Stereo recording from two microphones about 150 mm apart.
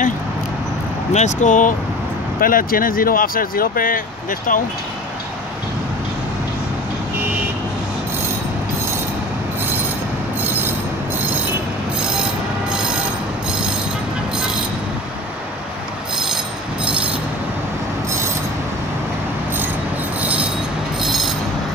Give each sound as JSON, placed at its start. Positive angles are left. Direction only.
{"t": 1.1, "sound": "speech", "side_deg": 55}
{"t": 2.4, "sound": "speech", "side_deg": 70}
{"t": 20.2, "sound": "train wheels squealing", "side_deg": -10}